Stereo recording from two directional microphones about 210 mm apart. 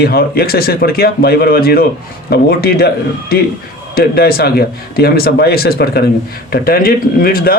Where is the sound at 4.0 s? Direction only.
45° left (ahead or behind).